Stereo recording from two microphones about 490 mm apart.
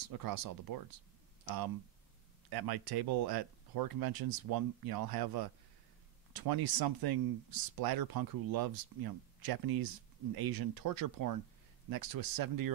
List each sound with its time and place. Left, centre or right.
0.1 s speech: right
2.5 s speech: right